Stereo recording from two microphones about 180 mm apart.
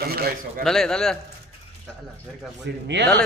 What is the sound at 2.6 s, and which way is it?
Speech, 75° right (ahead or behind).